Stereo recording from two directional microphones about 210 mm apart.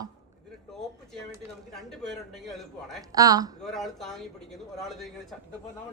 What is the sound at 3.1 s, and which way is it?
Speech, 15° right (ahead or behind).